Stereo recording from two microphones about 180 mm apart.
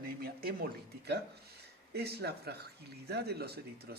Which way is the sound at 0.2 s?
55° right (ahead or behind).